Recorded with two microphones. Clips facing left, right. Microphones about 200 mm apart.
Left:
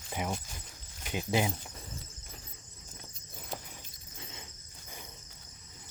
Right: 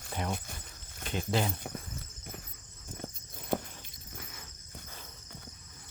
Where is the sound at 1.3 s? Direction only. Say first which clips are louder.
Left 1 dB; 15° left (ahead or behind).